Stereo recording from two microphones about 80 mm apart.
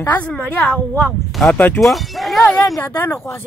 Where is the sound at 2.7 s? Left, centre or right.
Left.